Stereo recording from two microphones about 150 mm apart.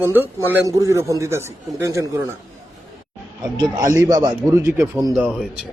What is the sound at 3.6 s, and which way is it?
A man's voice, 20° right (ahead or behind).